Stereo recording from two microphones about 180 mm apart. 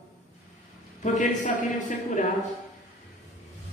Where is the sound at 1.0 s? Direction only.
45° left (ahead or behind).